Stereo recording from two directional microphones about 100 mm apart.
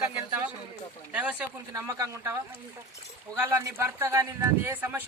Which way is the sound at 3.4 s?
30° right (ahead or behind).